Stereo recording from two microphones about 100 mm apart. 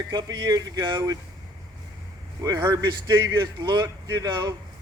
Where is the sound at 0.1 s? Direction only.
40° right (ahead or behind).